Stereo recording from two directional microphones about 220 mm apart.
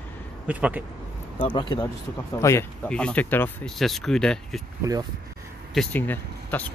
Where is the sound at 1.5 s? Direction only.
20° left (ahead or behind); by 4.6 s centre (ahead or behind).